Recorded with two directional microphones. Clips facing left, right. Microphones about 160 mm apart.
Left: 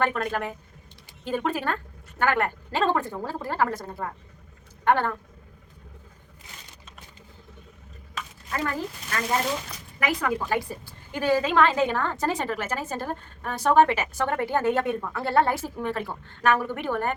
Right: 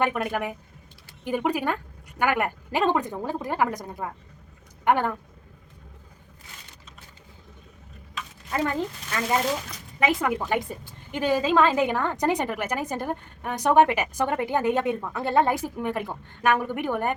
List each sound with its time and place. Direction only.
0.0 s a woman's voice: 15° right (ahead or behind)
8.5 s speech: 20° right (ahead or behind)
10.0 s a woman's voice: 20° right (ahead or behind)